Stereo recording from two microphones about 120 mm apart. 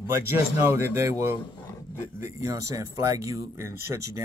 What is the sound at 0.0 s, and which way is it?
Speech, 20° right (ahead or behind).